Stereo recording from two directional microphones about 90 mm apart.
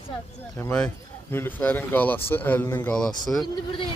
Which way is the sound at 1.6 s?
20° left (ahead or behind).